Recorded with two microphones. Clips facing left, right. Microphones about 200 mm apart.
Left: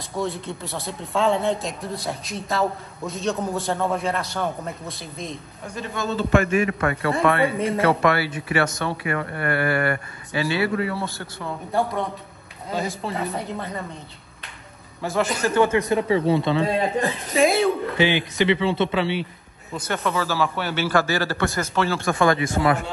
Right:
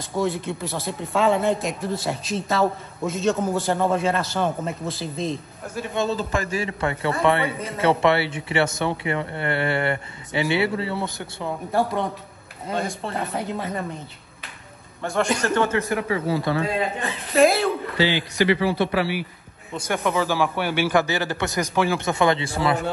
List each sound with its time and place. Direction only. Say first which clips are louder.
0.1 s speech: right 3 dB; centre (ahead or behind)
5.9 s speech: left 3 dB; 35° right (ahead or behind); by 11.5 s 20° right (ahead or behind)
12.7 s speech: even; centre (ahead or behind)
15.0 s speech: right 1 dB; centre (ahead or behind)
15.6 s a man's voice: left 3 dB; 20° left (ahead or behind)
17.3 s speech: right 2 dB; centre (ahead or behind)
17.9 s a man's voice: left 1 dB; 20° left (ahead or behind)
19.8 s speech: right 2 dB; 15° right (ahead or behind); by 22.8 s 30° right (ahead or behind)